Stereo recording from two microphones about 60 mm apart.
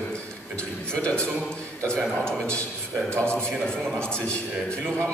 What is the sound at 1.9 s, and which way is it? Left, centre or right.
A man's voice, centre.